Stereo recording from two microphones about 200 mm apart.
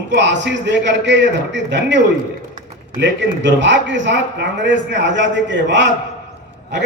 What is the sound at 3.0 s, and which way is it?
A man's voice, 65° right (ahead or behind).